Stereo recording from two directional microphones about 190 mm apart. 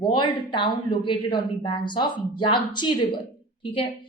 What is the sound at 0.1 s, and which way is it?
Speech, 25° left (ahead or behind).